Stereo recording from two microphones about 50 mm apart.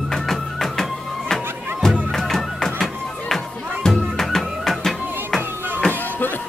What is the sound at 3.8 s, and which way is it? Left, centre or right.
Music, centre.